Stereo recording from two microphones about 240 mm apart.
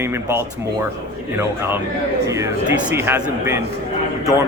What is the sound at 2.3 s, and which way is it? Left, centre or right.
A man's voice, centre.